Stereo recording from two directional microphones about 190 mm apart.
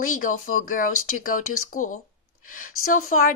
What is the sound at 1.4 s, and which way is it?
Speech, 90° left.